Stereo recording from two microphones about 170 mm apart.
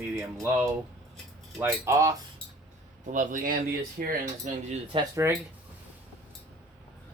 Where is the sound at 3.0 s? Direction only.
50° right (ahead or behind).